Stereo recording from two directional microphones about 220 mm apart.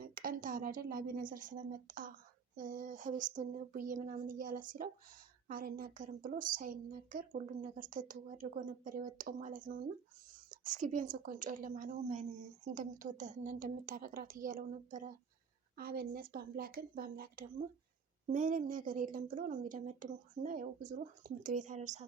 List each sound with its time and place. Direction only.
0.0 s a woman's voice: 40° right (ahead or behind)